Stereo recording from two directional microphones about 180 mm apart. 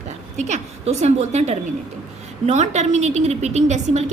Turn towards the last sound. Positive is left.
turn(degrees=-40)  # may be behind; listen again after turning